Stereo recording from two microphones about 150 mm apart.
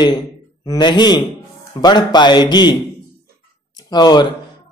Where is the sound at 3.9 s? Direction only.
25° left (ahead or behind).